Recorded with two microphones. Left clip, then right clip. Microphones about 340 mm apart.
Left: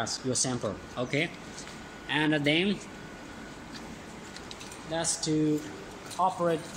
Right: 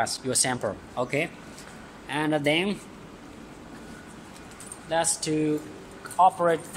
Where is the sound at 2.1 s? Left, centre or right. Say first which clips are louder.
Right 2 dB; centre.